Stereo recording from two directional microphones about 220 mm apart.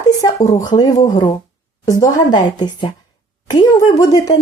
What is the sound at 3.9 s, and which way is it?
Speech, 15° left (ahead or behind).